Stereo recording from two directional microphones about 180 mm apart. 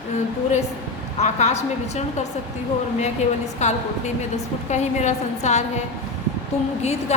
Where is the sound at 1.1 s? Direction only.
40° left (ahead or behind).